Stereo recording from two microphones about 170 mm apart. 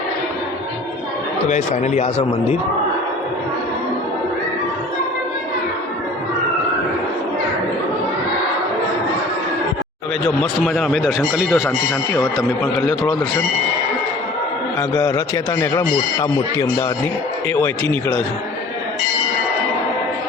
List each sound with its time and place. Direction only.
1.5 s speech: 45° left (ahead or behind)
10.2 s speech: centre (ahead or behind)
14.8 s speech: 15° left (ahead or behind)